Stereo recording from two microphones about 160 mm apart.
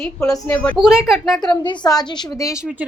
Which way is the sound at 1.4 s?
30° left (ahead or behind).